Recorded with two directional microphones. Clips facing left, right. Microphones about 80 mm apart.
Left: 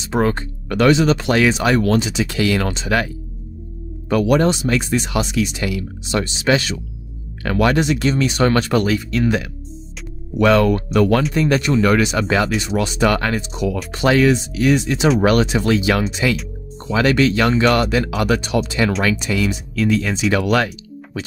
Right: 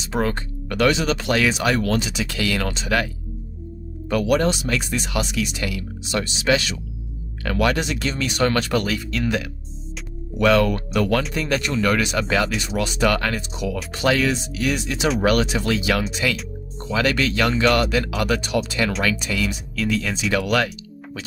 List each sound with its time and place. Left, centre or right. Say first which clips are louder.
0.1 s speech: left 5 dB; left
4.1 s speech: left 4 dB; left
10.4 s speech: left 3 dB; left